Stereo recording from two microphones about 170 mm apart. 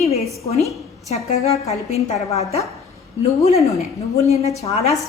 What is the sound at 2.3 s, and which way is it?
Speech, 40° left (ahead or behind).